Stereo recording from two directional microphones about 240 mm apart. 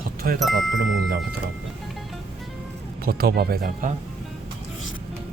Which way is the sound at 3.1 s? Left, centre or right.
Right.